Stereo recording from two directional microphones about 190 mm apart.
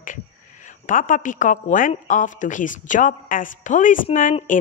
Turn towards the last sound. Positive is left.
turn(degrees=45)  # may be behind; listen again after turning